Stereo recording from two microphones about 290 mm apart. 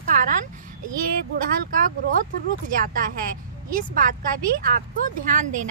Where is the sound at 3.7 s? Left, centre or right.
Right.